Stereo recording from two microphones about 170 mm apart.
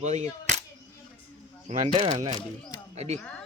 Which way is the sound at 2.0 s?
30° right (ahead or behind).